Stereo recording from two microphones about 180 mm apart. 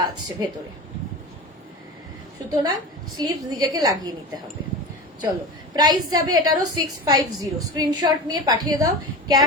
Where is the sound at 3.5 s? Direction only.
20° right (ahead or behind).